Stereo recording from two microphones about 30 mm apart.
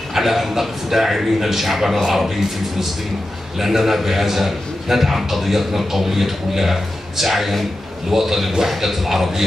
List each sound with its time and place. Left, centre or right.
0.1 s a man's voice: centre
3.5 s a man's voice: centre